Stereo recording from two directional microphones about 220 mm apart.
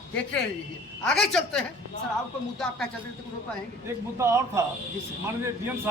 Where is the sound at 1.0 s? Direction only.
Centre (ahead or behind).